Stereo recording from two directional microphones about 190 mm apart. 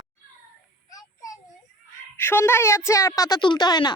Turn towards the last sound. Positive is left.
turn(degrees=20)  # may be behind; listen again after turning